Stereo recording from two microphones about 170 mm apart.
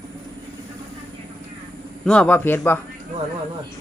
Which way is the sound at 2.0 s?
5° left (ahead or behind).